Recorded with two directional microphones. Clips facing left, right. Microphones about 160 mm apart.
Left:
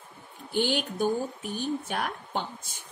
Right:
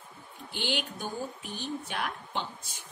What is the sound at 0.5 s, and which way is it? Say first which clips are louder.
Speech: left 7 dB; 45° left (ahead or behind).